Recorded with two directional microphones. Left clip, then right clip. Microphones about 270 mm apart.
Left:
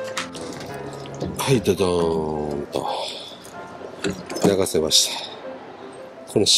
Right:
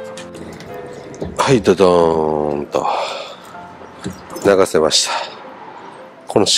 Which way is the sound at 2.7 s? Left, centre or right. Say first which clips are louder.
Right 8 dB; centre.